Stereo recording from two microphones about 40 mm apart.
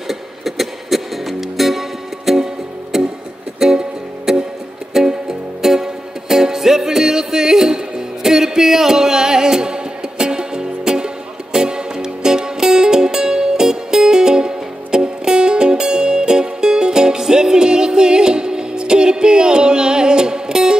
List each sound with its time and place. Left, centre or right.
0.1 s music: centre